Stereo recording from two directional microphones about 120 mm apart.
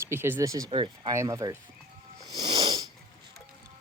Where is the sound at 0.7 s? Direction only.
40° right (ahead or behind).